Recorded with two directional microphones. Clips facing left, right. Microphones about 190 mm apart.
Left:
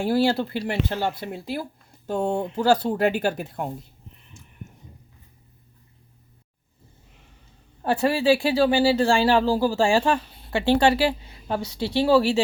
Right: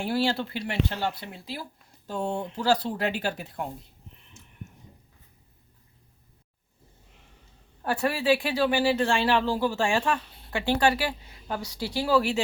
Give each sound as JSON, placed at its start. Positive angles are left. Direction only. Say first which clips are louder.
{"t": 0.0, "sound": "speech", "louder": "left 5 dB", "side_deg": 45}
{"t": 7.9, "sound": "speech", "louder": "left 4 dB", "side_deg": 25}